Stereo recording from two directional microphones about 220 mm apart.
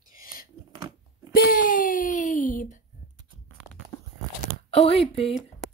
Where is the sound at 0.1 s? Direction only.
40° left (ahead or behind).